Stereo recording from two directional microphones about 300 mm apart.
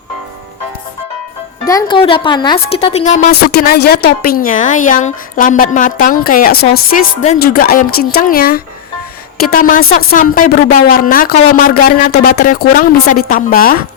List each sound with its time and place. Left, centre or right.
1.6 s a woman's voice: centre